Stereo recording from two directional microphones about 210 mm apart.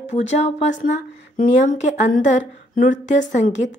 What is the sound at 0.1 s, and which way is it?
A woman's voice, 30° left (ahead or behind).